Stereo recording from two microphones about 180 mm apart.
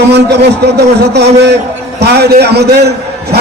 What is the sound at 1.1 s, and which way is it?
A man's voice, 70° right (ahead or behind).